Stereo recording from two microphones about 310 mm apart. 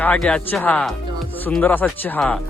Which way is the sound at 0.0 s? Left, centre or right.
Centre.